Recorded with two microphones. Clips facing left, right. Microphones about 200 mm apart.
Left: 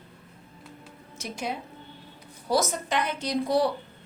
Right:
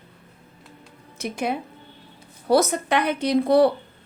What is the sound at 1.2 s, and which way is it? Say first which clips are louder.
A woman's voice: right 7 dB; 60° right (ahead or behind).